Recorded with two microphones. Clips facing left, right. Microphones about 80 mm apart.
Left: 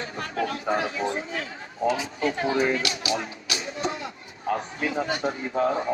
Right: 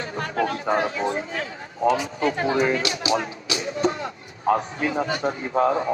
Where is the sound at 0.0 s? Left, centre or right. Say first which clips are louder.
Right 4 dB; right.